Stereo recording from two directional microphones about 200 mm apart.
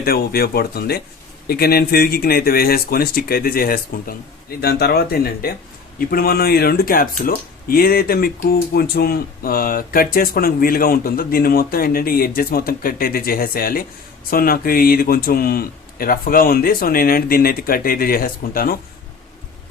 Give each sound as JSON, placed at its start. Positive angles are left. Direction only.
{"t": 0.0, "sound": "speech", "side_deg": 50}